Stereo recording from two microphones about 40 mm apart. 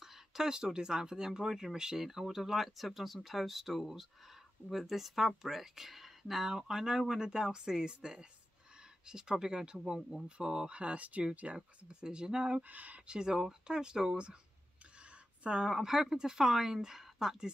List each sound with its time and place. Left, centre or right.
0.0 s speech: centre; by 11.2 s right
11.5 s speech: right
12.6 s speech: right
13.0 s speech: right
15.4 s a woman's voice: right
15.7 s speech: centre